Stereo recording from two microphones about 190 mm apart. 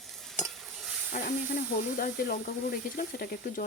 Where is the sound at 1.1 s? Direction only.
45° left (ahead or behind).